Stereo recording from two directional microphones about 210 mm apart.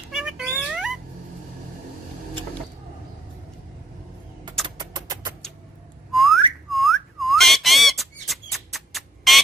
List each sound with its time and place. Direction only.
0.1 s cat: 5° right (ahead or behind)
4.8 s rodents: 20° right (ahead or behind)
6.1 s whistling: centre (ahead or behind)